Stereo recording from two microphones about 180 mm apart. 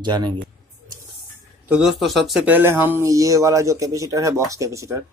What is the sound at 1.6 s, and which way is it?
Speech, 5° right (ahead or behind).